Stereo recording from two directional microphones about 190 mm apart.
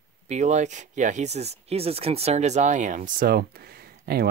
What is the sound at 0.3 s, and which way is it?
Speech, 35° right (ahead or behind).